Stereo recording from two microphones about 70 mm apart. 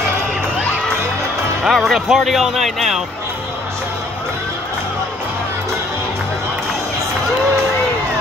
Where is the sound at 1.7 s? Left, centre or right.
Centre.